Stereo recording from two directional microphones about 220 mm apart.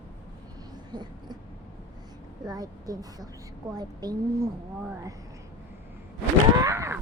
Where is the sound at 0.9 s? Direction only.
20° right (ahead or behind).